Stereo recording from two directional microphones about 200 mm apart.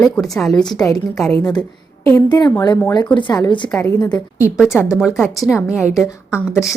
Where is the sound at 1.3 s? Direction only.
20° left (ahead or behind).